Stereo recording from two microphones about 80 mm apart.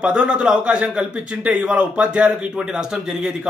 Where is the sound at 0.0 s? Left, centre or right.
Centre.